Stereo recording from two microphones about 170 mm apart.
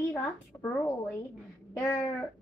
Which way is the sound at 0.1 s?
10° left (ahead or behind).